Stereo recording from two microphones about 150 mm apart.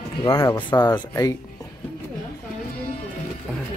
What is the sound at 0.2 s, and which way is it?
Speech, 20° left (ahead or behind).